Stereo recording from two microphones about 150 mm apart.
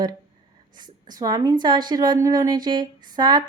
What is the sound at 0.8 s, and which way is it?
A woman's voice, 30° right (ahead or behind).